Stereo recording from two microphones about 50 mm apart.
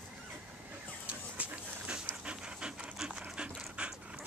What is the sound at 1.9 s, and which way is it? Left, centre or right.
Dog, centre.